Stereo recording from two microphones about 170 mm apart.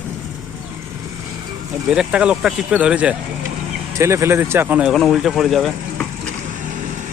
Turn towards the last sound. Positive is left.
turn(degrees=0)  # may be behind; listen again after turning